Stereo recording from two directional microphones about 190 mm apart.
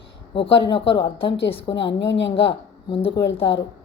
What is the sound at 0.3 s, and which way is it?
Speech, 70° left (ahead or behind).